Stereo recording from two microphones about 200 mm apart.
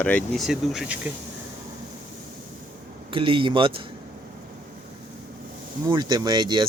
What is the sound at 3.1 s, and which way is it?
Speech, 25° right (ahead or behind).